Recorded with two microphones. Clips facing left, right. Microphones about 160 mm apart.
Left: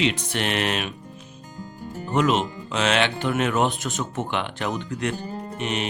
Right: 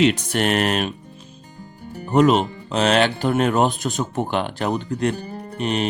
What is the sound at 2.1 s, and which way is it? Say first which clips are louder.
Speech: right 6 dB; 40° right (ahead or behind).